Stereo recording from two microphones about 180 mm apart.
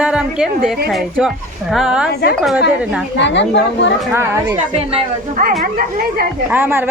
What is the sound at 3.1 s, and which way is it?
Speech, 80° left.